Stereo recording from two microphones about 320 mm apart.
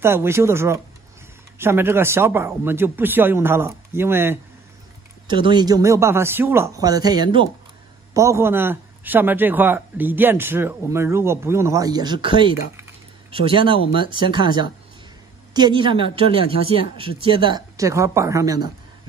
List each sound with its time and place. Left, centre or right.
0.0 s a man's voice: centre